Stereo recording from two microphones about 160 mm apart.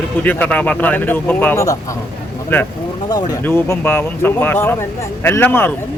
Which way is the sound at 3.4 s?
15° left (ahead or behind).